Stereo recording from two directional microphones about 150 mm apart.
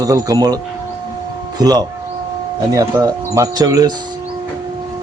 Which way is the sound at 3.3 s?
25° right (ahead or behind).